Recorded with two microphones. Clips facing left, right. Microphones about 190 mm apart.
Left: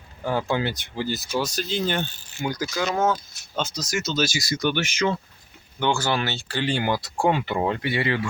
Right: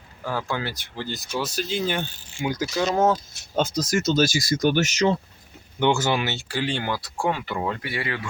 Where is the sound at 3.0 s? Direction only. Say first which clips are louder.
Right 2 dB; 40° right (ahead or behind).